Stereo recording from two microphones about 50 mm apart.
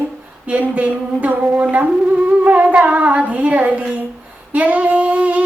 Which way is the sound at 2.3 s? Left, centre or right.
Right.